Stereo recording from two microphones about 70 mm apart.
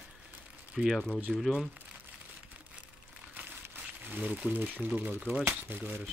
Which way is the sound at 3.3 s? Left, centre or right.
Right.